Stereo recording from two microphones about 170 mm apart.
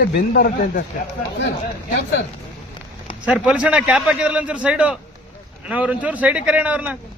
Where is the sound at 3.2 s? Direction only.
5° right (ahead or behind).